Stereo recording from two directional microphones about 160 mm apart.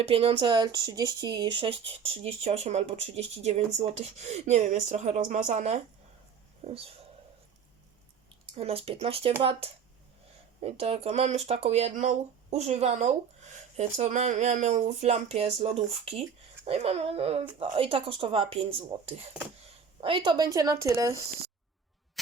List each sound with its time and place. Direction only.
0.1 s speech: 35° right (ahead or behind)
8.5 s a woman's voice: 35° right (ahead or behind); by 21.2 s 20° right (ahead or behind)